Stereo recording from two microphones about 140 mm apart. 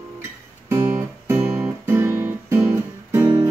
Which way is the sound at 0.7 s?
15° right (ahead or behind).